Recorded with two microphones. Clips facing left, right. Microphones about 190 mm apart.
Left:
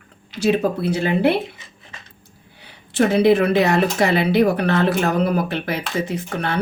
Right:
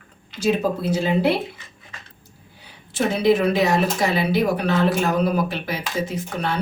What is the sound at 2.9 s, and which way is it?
Speech, 60° left (ahead or behind).